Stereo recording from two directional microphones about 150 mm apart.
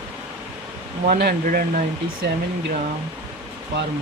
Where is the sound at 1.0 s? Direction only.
80° right.